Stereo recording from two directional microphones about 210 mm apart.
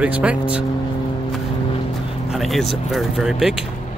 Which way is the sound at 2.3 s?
Centre (ahead or behind).